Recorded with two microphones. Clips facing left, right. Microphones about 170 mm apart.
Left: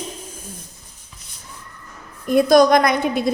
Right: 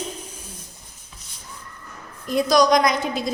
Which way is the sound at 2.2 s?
55° left (ahead or behind).